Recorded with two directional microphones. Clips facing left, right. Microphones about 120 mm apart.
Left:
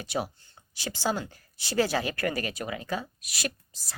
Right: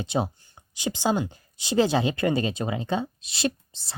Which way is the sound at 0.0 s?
20° right (ahead or behind).